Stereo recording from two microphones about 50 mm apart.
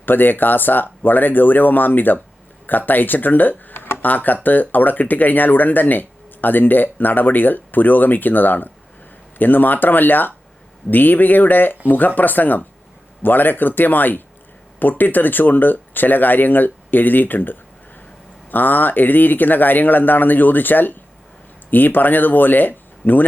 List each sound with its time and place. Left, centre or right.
0.0 s speech: left
3.7 s a sound: left
4.0 s speech: left